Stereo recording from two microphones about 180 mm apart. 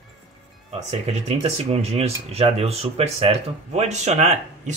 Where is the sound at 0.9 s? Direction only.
35° right (ahead or behind).